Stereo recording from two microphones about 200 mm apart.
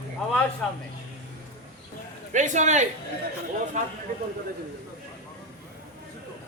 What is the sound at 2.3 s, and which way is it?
A man's voice, 40° right (ahead or behind).